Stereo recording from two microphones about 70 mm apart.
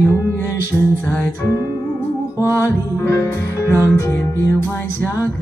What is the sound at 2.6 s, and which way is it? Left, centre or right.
Music, left.